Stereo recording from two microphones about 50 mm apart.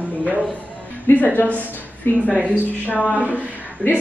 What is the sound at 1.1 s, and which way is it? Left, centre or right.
Speech, left.